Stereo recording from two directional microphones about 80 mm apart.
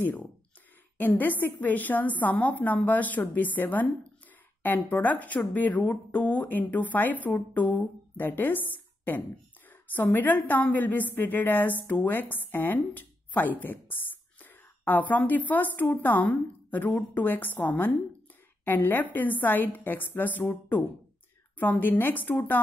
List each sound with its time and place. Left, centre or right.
0.0 s a woman's voice: centre
21.5 s speech: left